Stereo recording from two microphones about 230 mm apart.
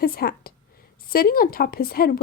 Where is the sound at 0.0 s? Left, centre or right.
Left.